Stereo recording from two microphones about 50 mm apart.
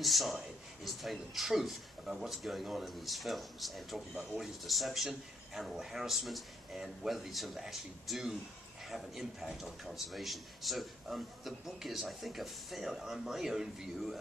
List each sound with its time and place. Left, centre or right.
0.0 s a man's voice: centre
4.1 s speech: centre
4.6 s a man's voice: centre